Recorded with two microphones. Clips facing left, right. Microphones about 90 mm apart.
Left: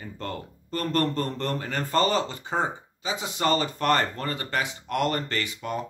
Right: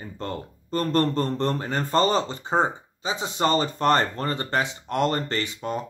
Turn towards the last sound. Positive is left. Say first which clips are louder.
# right 2 dB
turn(degrees=-30)  # may be behind; listen again after turning